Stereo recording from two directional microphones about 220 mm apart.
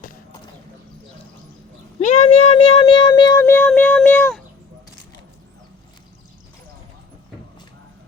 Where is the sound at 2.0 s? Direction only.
30° left (ahead or behind).